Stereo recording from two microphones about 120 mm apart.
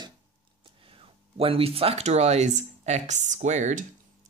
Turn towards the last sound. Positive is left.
turn(degrees=-90)